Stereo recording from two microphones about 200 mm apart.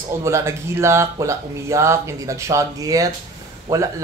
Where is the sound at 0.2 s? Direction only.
15° right (ahead or behind).